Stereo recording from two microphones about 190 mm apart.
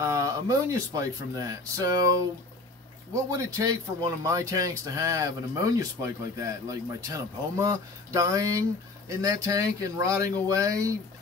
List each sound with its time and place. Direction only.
0.0 s speech: 15° right (ahead or behind)